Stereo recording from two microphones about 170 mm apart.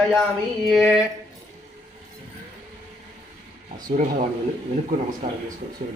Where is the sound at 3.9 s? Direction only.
50° right (ahead or behind).